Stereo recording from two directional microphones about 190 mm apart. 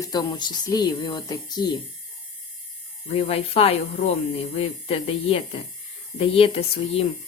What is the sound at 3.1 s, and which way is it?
Speech, 30° left (ahead or behind).